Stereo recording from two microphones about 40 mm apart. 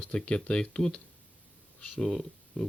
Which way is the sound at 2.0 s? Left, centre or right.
Centre.